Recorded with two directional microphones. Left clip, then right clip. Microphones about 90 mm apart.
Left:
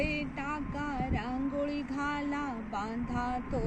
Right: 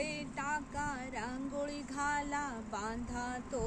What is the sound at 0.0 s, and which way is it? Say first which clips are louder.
Music: left 4 dB; 45° right (ahead or behind).